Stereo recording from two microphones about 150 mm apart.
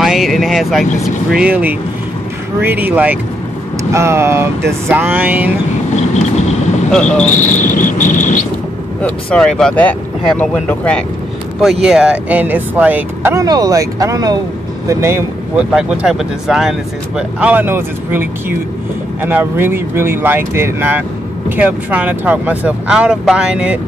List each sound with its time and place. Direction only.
0.0 s vehicle: centre (ahead or behind)
1.0 s speech: 5° right (ahead or behind)
5.9 s vehicle: 50° left (ahead or behind)
6.9 s cricket: 5° left (ahead or behind)
7.2 s cricket: 55° left (ahead or behind)
9.0 s speech: 5° left (ahead or behind)
11.6 s speech: 5° right (ahead or behind)
15.7 s speech: 5° right (ahead or behind)